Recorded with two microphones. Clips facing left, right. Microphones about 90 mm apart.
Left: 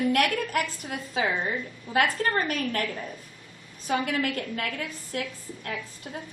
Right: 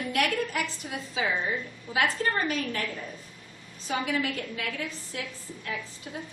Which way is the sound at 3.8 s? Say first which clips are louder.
Left 2 dB; 55° left (ahead or behind).